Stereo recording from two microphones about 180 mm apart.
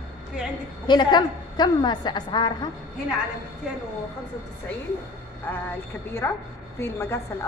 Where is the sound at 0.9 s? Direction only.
25° left (ahead or behind).